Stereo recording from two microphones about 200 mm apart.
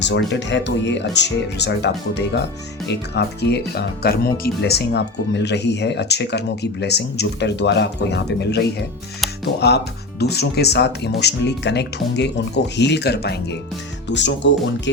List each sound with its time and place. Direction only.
0.0 s speech: 65° left (ahead or behind)